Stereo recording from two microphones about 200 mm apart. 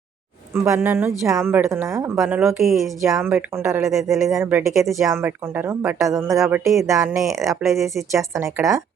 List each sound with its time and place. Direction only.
0.5 s a woman's voice: 15° right (ahead or behind)
4.1 s a woman's voice: centre (ahead or behind)